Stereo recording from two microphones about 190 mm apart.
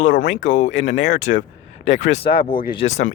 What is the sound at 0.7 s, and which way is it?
Speech, 75° left (ahead or behind).